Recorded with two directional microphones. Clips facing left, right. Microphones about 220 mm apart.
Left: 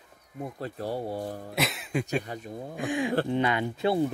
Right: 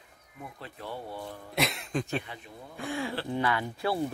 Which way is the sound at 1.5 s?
Centre (ahead or behind).